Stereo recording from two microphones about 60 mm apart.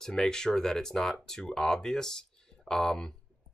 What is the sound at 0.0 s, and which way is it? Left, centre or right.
Speech, centre.